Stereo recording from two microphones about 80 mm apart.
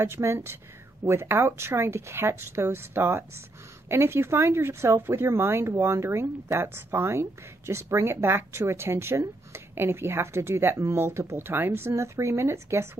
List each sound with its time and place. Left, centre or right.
0.0 s speech: right